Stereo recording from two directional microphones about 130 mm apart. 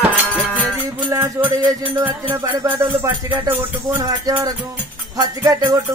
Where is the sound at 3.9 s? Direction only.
25° right (ahead or behind).